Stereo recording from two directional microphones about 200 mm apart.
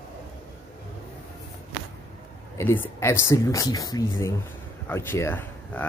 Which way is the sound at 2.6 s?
15° left (ahead or behind).